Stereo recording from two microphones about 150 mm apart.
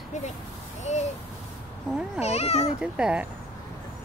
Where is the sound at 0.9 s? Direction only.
50° left (ahead or behind).